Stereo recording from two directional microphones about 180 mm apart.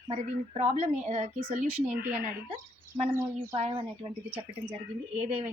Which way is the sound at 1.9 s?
10° right (ahead or behind).